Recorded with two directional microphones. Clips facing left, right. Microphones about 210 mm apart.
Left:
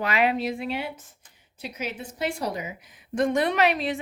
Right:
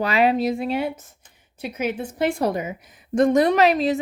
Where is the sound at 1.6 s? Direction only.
55° right (ahead or behind).